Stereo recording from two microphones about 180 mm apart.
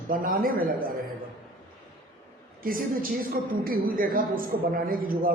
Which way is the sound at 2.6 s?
50° right (ahead or behind).